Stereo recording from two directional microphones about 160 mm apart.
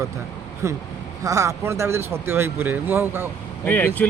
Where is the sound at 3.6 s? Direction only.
10° left (ahead or behind).